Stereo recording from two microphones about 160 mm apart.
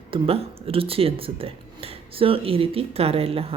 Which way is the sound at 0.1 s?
35° right (ahead or behind).